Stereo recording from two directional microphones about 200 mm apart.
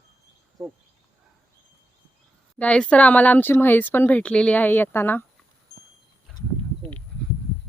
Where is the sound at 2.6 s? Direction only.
5° left (ahead or behind).